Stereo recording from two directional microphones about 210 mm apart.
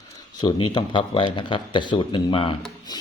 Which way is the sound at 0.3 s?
20° left (ahead or behind).